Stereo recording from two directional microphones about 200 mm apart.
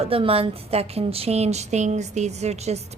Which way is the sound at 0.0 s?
30° right (ahead or behind).